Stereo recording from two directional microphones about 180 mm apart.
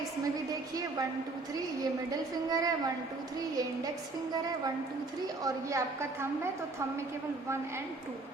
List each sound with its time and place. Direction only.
1.8 s a woman's voice: 20° right (ahead or behind)
5.2 s a woman's voice: 20° right (ahead or behind)